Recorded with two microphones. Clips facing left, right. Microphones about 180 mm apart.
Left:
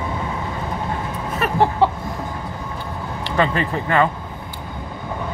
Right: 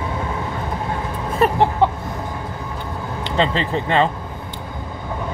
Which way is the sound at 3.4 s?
25° right (ahead or behind).